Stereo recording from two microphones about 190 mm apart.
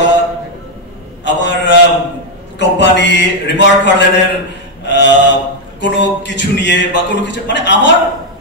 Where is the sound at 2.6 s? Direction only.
70° left (ahead or behind).